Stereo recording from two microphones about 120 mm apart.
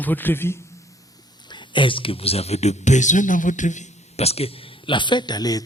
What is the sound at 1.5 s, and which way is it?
Speech, 40° left (ahead or behind).